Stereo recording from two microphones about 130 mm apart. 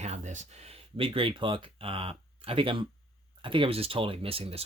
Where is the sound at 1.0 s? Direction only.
45° right (ahead or behind).